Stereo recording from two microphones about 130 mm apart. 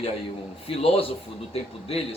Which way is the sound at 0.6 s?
45° left (ahead or behind).